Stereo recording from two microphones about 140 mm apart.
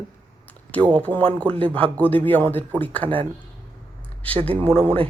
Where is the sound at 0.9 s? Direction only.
10° left (ahead or behind).